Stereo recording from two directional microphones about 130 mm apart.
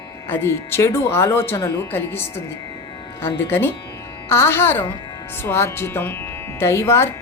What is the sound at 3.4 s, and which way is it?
Speech, 15° left (ahead or behind).